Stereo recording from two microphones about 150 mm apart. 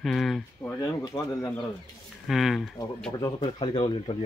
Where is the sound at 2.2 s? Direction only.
Centre (ahead or behind).